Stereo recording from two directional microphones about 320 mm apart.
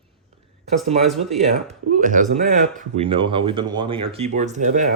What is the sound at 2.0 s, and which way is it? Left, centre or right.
Speech, right.